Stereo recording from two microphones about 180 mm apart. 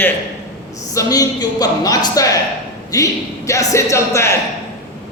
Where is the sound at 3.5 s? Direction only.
15° left (ahead or behind).